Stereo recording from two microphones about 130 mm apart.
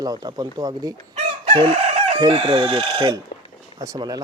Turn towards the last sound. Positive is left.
turn(degrees=-30)  # may be behind; listen again after turning